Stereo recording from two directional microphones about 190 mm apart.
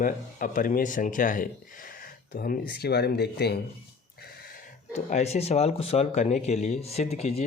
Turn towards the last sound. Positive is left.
turn(degrees=35)  # may be behind; listen again after turning